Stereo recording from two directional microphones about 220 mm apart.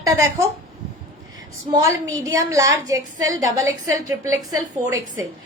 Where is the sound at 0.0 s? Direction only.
15° right (ahead or behind).